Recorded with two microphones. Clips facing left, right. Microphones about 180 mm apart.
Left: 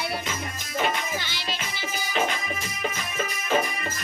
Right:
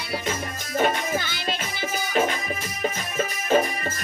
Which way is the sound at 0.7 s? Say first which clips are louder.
Right 4 dB; 50° right (ahead or behind).